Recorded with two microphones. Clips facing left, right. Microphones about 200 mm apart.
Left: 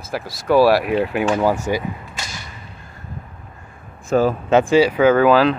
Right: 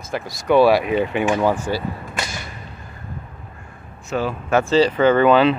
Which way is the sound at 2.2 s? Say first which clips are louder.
Right 5 dB; 60° right (ahead or behind).